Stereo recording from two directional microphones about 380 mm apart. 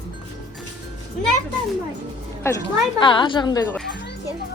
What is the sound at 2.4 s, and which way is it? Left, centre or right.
A woman's voice, centre.